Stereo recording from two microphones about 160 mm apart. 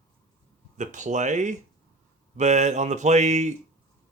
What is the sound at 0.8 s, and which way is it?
Speech, 50° right (ahead or behind).